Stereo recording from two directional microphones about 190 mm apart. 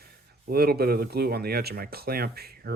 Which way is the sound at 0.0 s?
55° right (ahead or behind).